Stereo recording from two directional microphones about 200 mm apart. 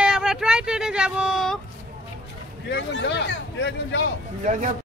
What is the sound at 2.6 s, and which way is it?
Speech, 60° left (ahead or behind).